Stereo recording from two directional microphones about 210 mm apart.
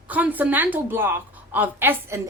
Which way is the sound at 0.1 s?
5° right (ahead or behind).